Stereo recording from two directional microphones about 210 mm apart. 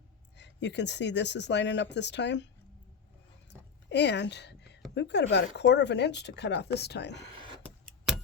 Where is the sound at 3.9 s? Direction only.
55° left (ahead or behind).